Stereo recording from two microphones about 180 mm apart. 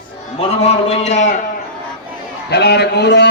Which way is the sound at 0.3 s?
35° left (ahead or behind).